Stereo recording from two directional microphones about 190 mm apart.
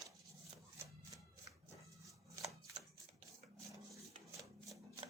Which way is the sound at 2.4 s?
15° right (ahead or behind).